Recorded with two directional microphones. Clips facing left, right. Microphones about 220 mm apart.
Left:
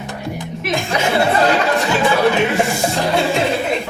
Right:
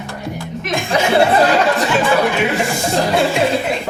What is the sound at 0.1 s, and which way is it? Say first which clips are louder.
Music: even; 20° left (ahead or behind).